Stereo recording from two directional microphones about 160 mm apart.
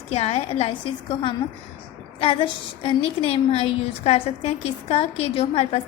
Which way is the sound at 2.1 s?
35° left (ahead or behind).